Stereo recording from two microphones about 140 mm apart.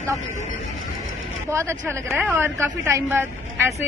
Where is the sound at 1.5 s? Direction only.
20° right (ahead or behind).